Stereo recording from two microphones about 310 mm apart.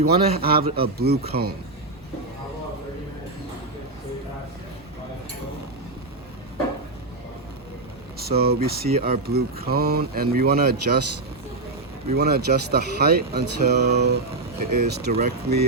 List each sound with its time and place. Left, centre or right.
0.0 s speech: right
8.2 s speech: right
12.1 s speech: right